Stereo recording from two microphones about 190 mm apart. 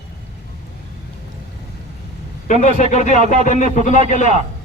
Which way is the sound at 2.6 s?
40° left (ahead or behind).